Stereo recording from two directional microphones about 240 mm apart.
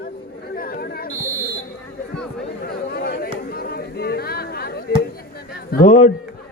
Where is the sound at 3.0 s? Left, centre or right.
Left.